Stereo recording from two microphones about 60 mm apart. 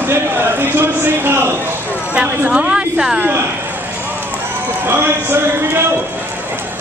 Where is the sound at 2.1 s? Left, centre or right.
Right.